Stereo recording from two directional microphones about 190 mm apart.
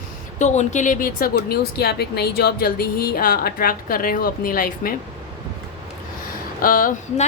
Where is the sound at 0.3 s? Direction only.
35° left (ahead or behind).